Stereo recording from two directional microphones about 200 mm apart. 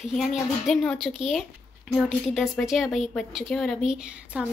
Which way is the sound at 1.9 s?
Centre (ahead or behind).